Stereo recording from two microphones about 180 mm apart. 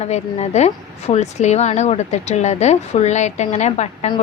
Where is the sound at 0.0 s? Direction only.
40° left (ahead or behind).